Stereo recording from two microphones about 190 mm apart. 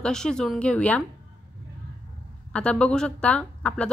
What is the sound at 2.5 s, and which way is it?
A woman's voice, 5° left (ahead or behind).